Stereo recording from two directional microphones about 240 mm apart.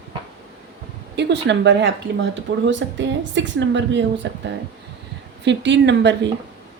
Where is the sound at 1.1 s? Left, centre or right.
Right.